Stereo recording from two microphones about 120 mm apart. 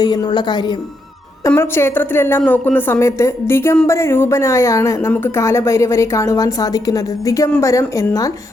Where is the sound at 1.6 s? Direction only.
20° left (ahead or behind).